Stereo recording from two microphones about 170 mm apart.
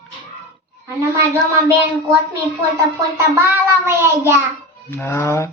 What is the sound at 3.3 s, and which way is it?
Child singing, 15° right (ahead or behind).